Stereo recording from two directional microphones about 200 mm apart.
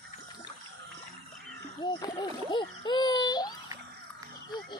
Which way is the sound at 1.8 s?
20° left (ahead or behind).